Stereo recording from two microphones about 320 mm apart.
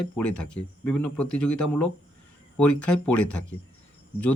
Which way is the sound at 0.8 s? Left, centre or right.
Centre.